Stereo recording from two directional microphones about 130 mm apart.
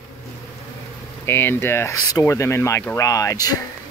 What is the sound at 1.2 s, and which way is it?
Speech, 15° left (ahead or behind).